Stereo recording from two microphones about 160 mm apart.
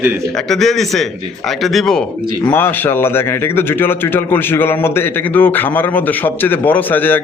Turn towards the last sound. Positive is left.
turn(degrees=10)  # may be behind; listen again after turning